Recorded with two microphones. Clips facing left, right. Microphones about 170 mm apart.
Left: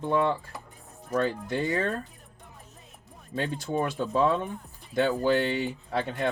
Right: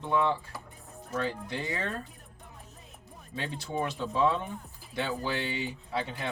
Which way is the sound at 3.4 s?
50° left (ahead or behind).